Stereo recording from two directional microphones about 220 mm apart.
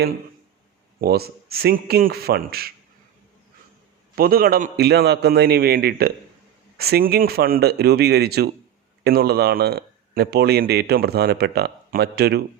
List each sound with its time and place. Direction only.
0.9 s speech: 45° right (ahead or behind)
4.1 s speech: 40° right (ahead or behind)